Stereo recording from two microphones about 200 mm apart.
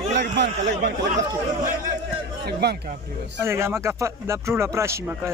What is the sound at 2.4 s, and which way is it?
Speech, 55° right (ahead or behind).